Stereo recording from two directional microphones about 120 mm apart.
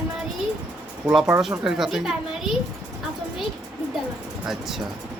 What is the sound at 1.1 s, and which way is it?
Speech, 5° right (ahead or behind).